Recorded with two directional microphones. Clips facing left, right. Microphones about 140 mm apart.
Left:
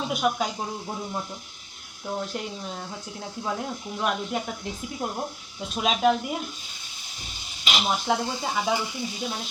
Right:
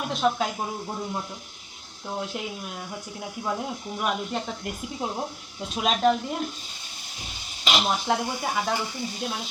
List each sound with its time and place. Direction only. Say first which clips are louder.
0.1 s speech: right 2 dB; 5° left (ahead or behind)
0.4 s speech: right 1 dB; 5° right (ahead or behind)
7.2 s a sound: right 2 dB; 40° right (ahead or behind)
7.9 s speech: even; 15° right (ahead or behind)